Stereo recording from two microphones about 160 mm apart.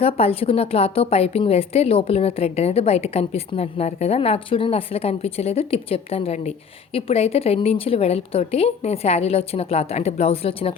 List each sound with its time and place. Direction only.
0.0 s a woman's voice: 40° left (ahead or behind)